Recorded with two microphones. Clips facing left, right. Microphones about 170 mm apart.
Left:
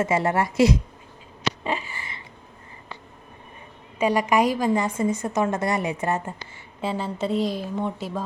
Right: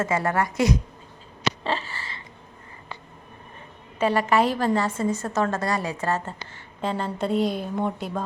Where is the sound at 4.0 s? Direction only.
15° left (ahead or behind).